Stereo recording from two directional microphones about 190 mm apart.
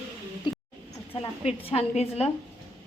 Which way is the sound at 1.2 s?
30° left (ahead or behind).